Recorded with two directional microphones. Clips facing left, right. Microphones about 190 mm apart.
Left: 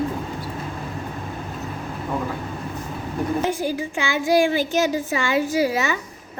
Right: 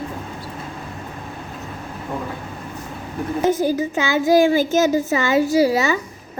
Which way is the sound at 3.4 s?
40° right (ahead or behind).